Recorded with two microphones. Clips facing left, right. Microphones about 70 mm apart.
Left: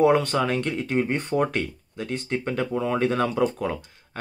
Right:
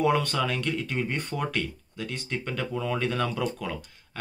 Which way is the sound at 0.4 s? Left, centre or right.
Left.